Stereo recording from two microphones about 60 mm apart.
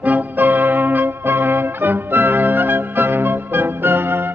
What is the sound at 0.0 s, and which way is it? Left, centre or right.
Music, right.